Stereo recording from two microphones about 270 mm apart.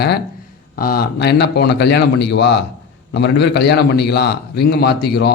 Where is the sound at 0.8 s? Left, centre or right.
Left.